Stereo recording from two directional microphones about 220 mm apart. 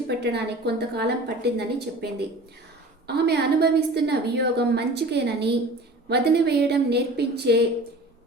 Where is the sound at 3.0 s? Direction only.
50° right (ahead or behind).